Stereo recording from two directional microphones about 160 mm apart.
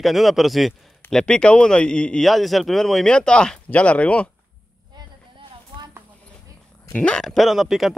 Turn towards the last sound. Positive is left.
turn(degrees=0)  # may be behind; listen again after turning